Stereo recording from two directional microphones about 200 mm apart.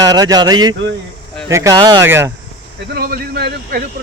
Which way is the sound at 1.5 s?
15° right (ahead or behind).